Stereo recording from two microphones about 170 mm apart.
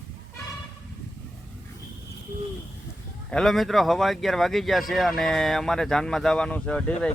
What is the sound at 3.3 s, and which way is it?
Speech, centre (ahead or behind).